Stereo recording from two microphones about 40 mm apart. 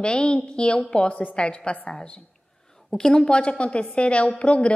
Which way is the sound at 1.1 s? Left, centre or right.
Left.